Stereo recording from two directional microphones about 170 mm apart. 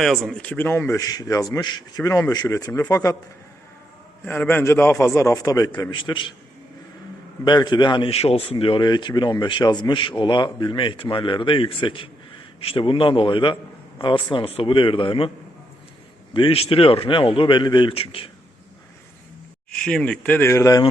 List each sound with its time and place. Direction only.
0.0 s a man's voice: centre (ahead or behind); by 3.2 s 20° left (ahead or behind)
4.3 s a man's voice: 10° left (ahead or behind); by 6.3 s 30° left (ahead or behind)
7.4 s a man's voice: 25° left (ahead or behind)
16.3 s a man's voice: 30° left (ahead or behind)
19.8 s a man's voice: 5° left (ahead or behind)